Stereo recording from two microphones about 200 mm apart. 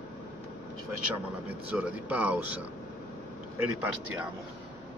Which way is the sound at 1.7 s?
10° right (ahead or behind).